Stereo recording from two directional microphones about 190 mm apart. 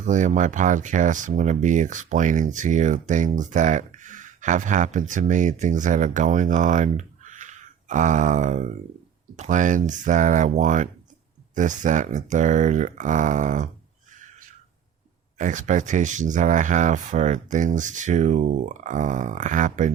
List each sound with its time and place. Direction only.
0.0 s speech: 40° right (ahead or behind)
15.4 s speech: 40° right (ahead or behind)